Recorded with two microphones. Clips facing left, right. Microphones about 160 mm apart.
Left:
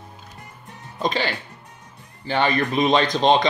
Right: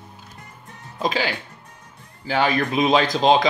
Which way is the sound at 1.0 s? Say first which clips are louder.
Even; 5° right (ahead or behind).